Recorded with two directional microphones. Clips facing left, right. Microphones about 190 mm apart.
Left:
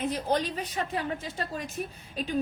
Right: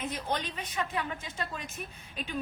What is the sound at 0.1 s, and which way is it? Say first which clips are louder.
A woman's voice: left 6 dB; 35° left (ahead or behind).